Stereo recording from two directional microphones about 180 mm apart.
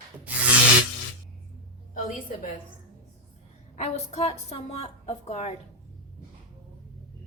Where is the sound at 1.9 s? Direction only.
50° left (ahead or behind).